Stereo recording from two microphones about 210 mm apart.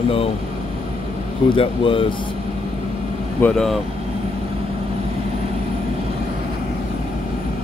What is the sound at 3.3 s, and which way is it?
Speech, 5° left (ahead or behind).